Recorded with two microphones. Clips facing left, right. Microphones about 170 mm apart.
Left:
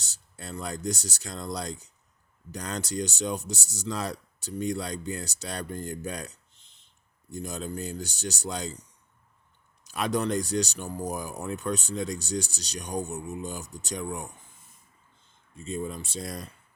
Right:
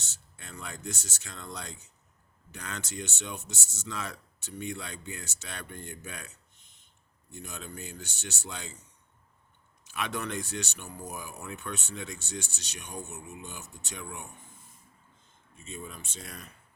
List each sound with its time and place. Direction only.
0.0 s speech: 35° left (ahead or behind)
9.8 s speech: 40° left (ahead or behind)
15.5 s speech: 35° left (ahead or behind)